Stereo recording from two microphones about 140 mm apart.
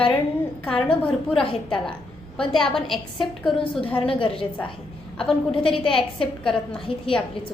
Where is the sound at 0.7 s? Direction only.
10° left (ahead or behind).